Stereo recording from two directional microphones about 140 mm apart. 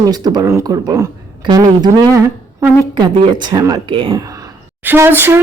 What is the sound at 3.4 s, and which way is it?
Speech, 30° right (ahead or behind).